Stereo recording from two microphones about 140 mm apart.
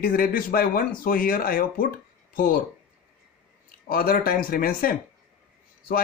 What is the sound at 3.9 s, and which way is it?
Speech, 90° left.